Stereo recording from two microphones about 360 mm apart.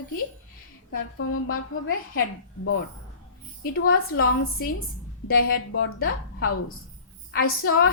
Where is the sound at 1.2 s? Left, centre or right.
Left.